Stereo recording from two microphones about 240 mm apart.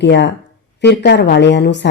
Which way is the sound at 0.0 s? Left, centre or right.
Left.